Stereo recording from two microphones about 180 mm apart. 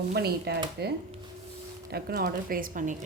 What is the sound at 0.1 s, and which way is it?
Speech, 65° right (ahead or behind).